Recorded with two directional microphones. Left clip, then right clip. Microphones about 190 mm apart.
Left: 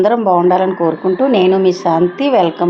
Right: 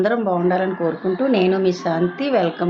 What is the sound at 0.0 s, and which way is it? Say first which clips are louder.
Speech: left 8 dB; 20° left (ahead or behind).